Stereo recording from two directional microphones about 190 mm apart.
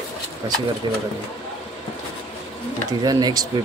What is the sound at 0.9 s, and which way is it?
Speech, 20° right (ahead or behind).